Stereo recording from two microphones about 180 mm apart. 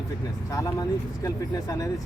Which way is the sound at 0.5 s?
20° left (ahead or behind).